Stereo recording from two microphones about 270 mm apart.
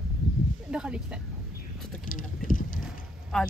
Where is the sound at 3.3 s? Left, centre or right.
Centre.